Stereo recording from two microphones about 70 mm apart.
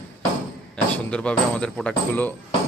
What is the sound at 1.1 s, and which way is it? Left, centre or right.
Speech, centre.